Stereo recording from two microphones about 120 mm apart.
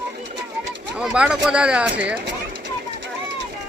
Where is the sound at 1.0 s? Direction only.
10° right (ahead or behind).